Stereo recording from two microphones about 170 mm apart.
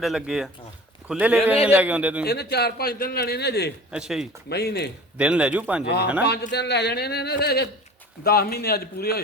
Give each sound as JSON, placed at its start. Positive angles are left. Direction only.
{"t": 0.0, "sound": "speech", "side_deg": 0}
{"t": 2.2, "sound": "a man's voice", "side_deg": 70}
{"t": 3.9, "sound": "speech", "side_deg": -5}
{"t": 4.4, "sound": "a man's voice", "side_deg": 70}
{"t": 5.1, "sound": "speech", "side_deg": -5}
{"t": 6.5, "sound": "a man's voice", "side_deg": 80}